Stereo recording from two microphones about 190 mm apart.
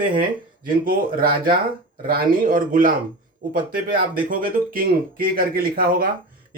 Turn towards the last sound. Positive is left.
turn(degrees=-50)  # may be behind; listen again after turning